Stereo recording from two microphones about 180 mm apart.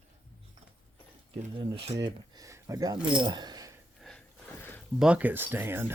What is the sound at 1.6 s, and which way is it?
Speech, 30° right (ahead or behind).